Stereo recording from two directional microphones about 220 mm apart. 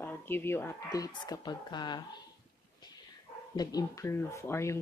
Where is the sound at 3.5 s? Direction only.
15° left (ahead or behind).